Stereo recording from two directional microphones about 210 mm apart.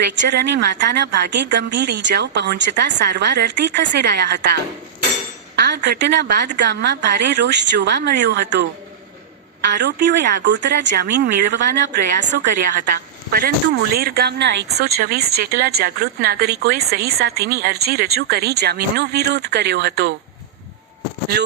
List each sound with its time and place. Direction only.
0.0 s a woman's voice: 55° right (ahead or behind)
9.7 s a woman's voice: 55° right (ahead or behind); by 12.9 s 40° right (ahead or behind)
13.9 s speech: 45° right (ahead or behind)